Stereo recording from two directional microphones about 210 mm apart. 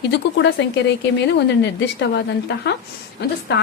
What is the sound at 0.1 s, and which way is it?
A woman's voice, 55° left (ahead or behind).